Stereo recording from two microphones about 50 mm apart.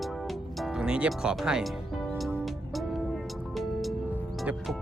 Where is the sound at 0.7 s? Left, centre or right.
Centre.